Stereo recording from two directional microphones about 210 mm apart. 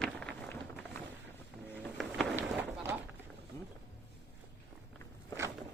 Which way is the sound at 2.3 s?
10° right (ahead or behind).